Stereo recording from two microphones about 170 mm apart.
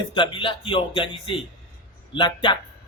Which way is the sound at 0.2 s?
30° left (ahead or behind).